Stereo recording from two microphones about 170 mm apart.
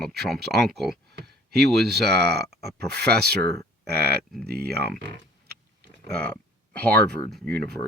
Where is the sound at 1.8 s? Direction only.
70° right (ahead or behind).